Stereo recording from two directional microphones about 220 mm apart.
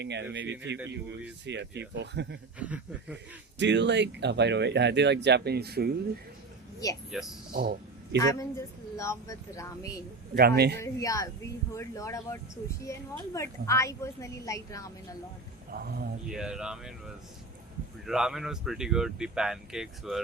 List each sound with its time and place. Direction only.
0.0 s speech: 50° right (ahead or behind)
1.5 s speech: 50° right (ahead or behind)
2.6 s speech: 5° right (ahead or behind)
3.6 s speech: 55° right (ahead or behind)
7.1 s speech: centre (ahead or behind)
7.5 s speech: 45° right (ahead or behind)
8.2 s speech: 15° left (ahead or behind)
10.3 s speech: 45° right (ahead or behind)
10.8 s speech: 15° left (ahead or behind)
15.7 s speech: 45° right (ahead or behind)
16.3 s speech: 5° right (ahead or behind)
18.0 s speech: centre (ahead or behind)